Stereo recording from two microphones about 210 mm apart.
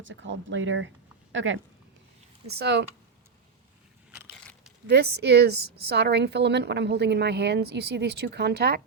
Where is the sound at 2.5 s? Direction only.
50° right (ahead or behind).